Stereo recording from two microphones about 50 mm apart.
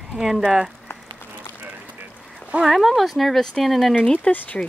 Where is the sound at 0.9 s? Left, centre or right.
Left.